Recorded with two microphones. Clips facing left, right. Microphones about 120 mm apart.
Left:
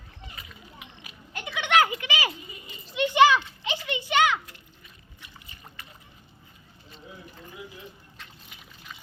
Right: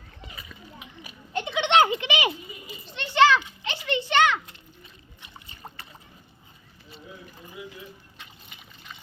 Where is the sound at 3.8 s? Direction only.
10° left (ahead or behind).